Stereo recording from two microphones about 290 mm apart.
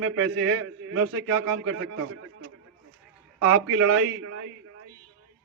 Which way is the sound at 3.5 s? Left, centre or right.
Right.